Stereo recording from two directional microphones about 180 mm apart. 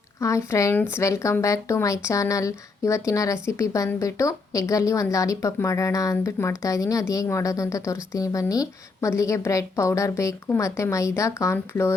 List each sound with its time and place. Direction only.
0.2 s a woman's voice: 15° left (ahead or behind)